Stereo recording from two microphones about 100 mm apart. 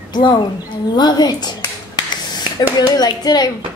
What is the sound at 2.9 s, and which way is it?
Speech, 40° left (ahead or behind).